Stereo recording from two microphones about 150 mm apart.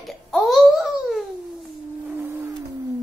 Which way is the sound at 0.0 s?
Centre (ahead or behind).